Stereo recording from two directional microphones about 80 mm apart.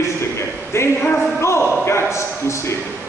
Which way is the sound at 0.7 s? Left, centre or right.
Left.